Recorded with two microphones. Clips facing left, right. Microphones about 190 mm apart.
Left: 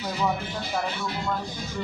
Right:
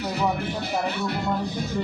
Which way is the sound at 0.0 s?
65° right (ahead or behind).